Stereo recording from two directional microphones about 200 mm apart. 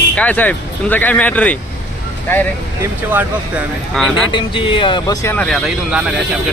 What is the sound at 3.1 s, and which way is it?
Speech, 10° right (ahead or behind).